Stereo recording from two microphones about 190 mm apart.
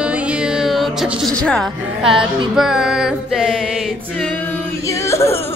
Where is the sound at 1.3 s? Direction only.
5° left (ahead or behind).